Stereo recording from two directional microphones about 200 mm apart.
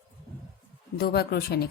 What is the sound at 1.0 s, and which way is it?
Speech, 55° left (ahead or behind).